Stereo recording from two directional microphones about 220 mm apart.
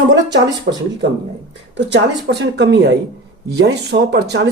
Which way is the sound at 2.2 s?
50° right (ahead or behind).